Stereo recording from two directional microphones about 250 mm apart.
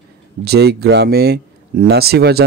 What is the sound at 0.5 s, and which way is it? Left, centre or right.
Speech, right.